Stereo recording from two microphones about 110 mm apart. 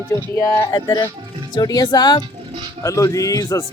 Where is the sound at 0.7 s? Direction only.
40° left (ahead or behind).